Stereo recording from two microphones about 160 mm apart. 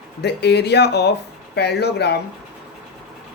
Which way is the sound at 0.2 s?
90° left.